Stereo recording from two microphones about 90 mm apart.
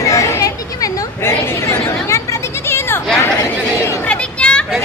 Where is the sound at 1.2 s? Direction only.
30° left (ahead or behind).